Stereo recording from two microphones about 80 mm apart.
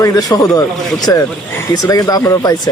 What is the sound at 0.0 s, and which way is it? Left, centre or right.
Speech, left.